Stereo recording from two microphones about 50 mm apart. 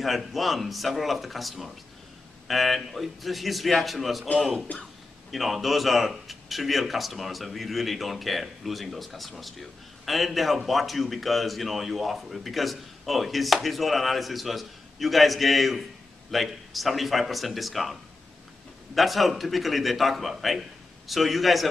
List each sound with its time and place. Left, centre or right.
0.0 s a man's voice: centre
4.7 s speech: left
5.3 s a man's voice: centre
18.9 s a man's voice: centre